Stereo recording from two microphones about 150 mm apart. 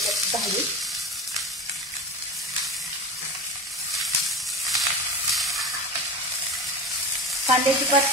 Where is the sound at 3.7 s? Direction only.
Centre (ahead or behind).